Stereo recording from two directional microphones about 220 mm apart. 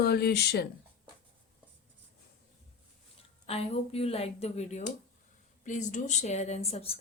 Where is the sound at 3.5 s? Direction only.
25° left (ahead or behind).